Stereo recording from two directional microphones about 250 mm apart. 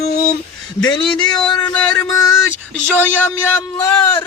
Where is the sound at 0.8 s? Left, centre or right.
Centre.